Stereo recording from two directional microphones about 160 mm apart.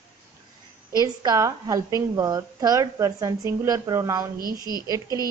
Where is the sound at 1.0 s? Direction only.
25° right (ahead or behind).